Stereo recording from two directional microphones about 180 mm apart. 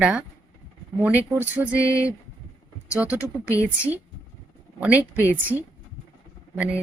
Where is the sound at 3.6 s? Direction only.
10° right (ahead or behind).